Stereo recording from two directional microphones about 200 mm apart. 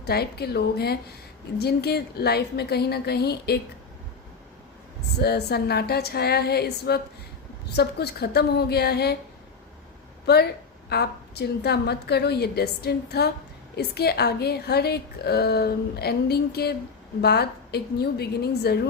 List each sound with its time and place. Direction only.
0.0 s a woman's voice: 55° left (ahead or behind)
5.2 s a woman's voice: 55° left (ahead or behind)
10.8 s a woman's voice: 55° left (ahead or behind)